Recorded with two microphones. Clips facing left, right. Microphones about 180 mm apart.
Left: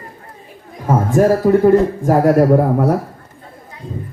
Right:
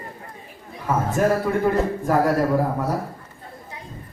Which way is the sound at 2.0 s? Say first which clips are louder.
Left 7 dB; 50° left (ahead or behind).